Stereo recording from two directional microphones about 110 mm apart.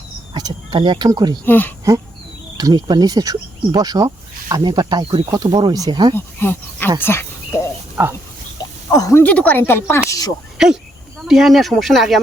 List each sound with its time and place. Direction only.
0.3 s speech: 40° right (ahead or behind)
1.5 s speech: 15° left (ahead or behind)
2.6 s speech: 40° right (ahead or behind)
6.1 s speech: 20° left (ahead or behind)
7.0 s cricket: 25° left (ahead or behind)
8.5 s a sound: 35° left (ahead or behind)
9.1 s speech: 15° left (ahead or behind)
10.1 s speech: 35° left (ahead or behind)
10.6 s speech: 5° right (ahead or behind)